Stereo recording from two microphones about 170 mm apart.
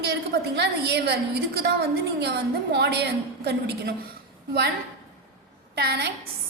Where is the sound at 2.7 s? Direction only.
75° right (ahead or behind).